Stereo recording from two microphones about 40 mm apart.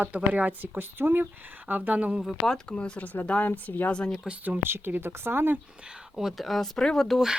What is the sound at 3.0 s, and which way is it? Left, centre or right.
Speech, left.